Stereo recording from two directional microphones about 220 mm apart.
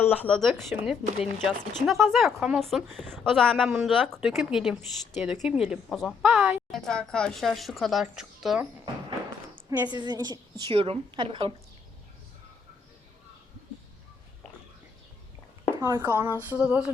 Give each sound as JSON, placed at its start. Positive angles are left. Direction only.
{"t": 0.0, "sound": "a woman's voice", "side_deg": 5}
{"t": 3.7, "sound": "a woman's voice", "side_deg": -10}
{"t": 9.6, "sound": "a woman's voice", "side_deg": -15}
{"t": 15.8, "sound": "speech", "side_deg": -10}